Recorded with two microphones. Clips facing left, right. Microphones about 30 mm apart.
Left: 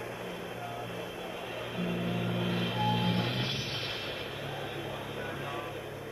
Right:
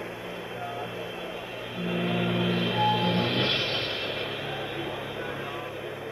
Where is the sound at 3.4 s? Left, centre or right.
Right.